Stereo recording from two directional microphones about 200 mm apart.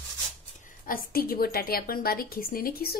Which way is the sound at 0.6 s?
45° left (ahead or behind).